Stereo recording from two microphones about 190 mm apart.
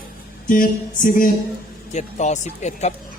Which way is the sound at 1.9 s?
35° left (ahead or behind).